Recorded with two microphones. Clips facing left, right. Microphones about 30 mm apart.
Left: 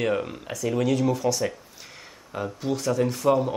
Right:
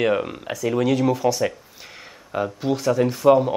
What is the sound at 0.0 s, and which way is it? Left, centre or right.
Speech, right.